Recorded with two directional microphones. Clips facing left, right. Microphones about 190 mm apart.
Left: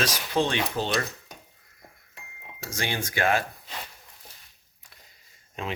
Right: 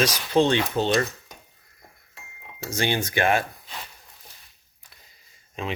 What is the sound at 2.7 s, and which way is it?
Speech, 25° right (ahead or behind).